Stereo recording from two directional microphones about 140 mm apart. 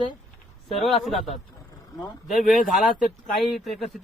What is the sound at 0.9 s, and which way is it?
Speech, centre (ahead or behind).